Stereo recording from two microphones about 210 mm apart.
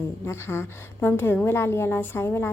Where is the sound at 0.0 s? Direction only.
10° left (ahead or behind).